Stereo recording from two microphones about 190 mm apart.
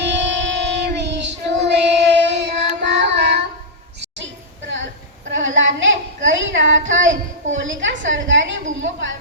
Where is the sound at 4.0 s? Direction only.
70° right (ahead or behind).